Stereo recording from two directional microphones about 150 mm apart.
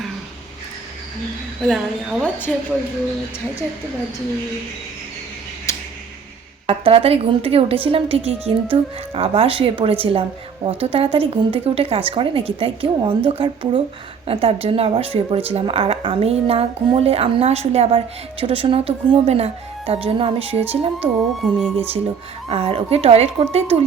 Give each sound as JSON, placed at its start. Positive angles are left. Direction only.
{"t": 1.6, "sound": "speech", "side_deg": 0}
{"t": 5.7, "sound": "a sound", "side_deg": 20}
{"t": 6.7, "sound": "a woman's voice", "side_deg": -40}
{"t": 22.4, "sound": "speech", "side_deg": -40}